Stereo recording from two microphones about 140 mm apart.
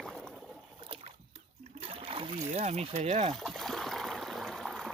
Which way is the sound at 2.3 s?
50° right (ahead or behind).